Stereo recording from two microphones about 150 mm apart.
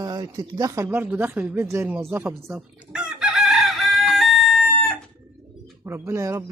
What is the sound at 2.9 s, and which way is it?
Chicken, 5° right (ahead or behind).